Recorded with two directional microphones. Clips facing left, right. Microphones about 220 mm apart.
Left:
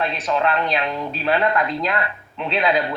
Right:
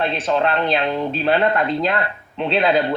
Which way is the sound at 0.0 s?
30° right (ahead or behind).